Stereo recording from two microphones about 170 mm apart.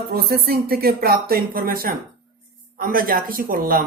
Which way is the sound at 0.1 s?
65° right (ahead or behind).